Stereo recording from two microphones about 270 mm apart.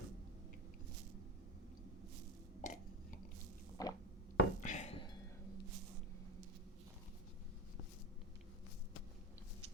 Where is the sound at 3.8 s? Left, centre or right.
Centre.